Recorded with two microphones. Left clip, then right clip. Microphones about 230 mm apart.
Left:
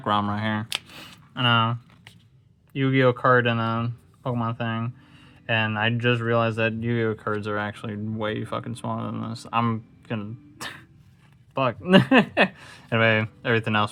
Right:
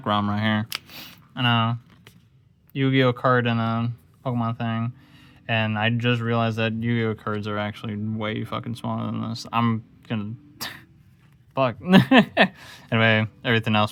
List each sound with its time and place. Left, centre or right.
0.0 s speech: right